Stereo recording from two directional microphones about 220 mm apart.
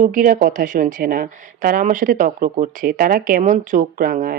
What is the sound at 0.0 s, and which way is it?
Speech, 40° right (ahead or behind).